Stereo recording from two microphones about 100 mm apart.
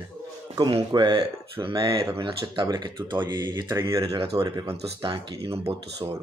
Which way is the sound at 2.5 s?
50° right (ahead or behind).